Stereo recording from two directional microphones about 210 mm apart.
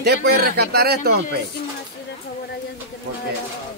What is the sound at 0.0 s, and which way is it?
Speech, 50° right (ahead or behind).